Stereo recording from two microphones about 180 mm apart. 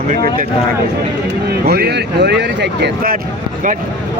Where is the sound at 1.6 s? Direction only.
60° right (ahead or behind).